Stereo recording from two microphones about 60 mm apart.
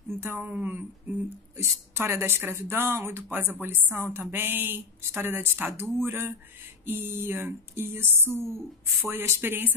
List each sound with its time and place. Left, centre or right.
0.1 s a woman's voice: right
1.6 s a woman's voice: right